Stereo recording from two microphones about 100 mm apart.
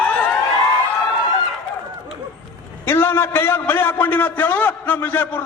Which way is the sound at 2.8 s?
20° left (ahead or behind).